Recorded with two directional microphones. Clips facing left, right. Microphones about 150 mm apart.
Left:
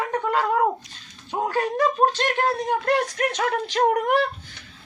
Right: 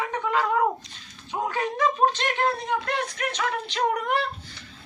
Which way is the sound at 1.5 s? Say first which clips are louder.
Left 3 dB; 40° left (ahead or behind).